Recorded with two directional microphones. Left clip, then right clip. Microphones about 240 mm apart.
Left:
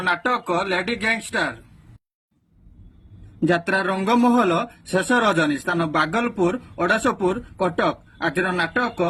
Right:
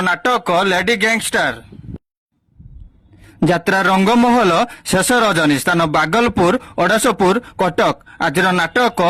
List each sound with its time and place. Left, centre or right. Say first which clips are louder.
0.0 s speech: right 6 dB; right
3.5 s speech: right 7 dB; right